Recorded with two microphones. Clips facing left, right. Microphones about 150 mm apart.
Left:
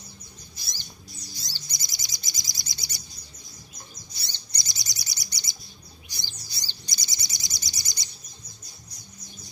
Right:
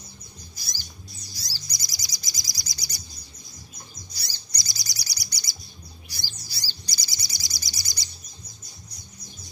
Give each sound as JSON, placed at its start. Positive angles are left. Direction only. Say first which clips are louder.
{"t": 0.6, "sound": "music", "louder": "right 2 dB", "side_deg": 25}
{"t": 1.3, "sound": "chirp", "louder": "right 1 dB", "side_deg": 25}
{"t": 4.1, "sound": "chirp", "louder": "right 1 dB", "side_deg": 25}
{"t": 6.0, "sound": "bird", "louder": "right 2 dB", "side_deg": 20}